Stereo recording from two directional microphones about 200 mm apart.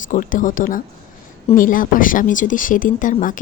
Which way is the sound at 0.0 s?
40° left (ahead or behind).